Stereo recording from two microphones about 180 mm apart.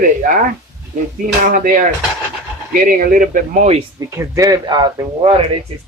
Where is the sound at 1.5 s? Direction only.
50° right (ahead or behind).